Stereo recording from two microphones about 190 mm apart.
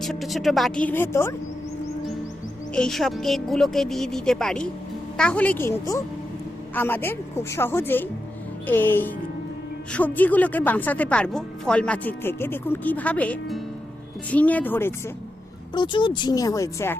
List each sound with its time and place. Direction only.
0.0 s speech: centre (ahead or behind)
2.7 s a woman's voice: centre (ahead or behind)
15.7 s speech: 25° left (ahead or behind)